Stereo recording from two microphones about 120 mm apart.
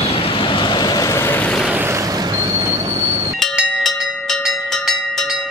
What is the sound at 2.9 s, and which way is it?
Train, 40° right (ahead or behind).